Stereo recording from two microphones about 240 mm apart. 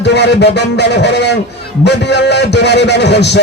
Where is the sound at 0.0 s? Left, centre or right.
Left.